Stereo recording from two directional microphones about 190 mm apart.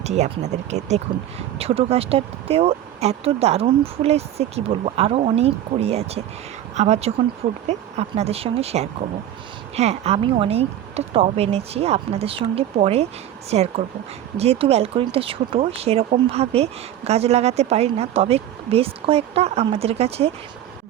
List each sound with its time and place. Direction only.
0.0 s speech: 35° right (ahead or behind)